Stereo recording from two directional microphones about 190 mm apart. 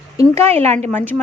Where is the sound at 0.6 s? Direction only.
35° right (ahead or behind).